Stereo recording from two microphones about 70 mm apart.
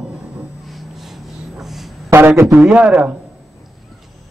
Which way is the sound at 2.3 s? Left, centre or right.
Right.